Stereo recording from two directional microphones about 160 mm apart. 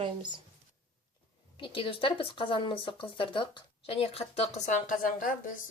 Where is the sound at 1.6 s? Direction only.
35° left (ahead or behind).